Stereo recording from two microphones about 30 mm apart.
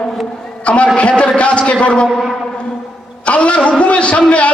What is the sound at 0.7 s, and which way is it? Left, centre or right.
A man's voice, left.